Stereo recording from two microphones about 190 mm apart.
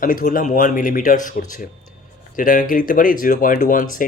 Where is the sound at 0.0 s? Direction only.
45° left (ahead or behind).